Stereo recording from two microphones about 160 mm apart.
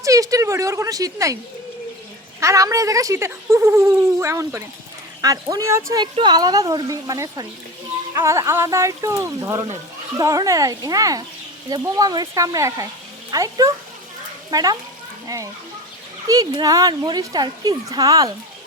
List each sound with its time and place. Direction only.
0.0 s speech: 20° right (ahead or behind)
2.4 s speech: 20° right (ahead or behind)
16.2 s speech: 20° right (ahead or behind)